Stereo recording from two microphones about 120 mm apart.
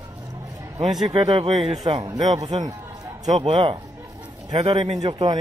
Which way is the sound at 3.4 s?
50° right (ahead or behind).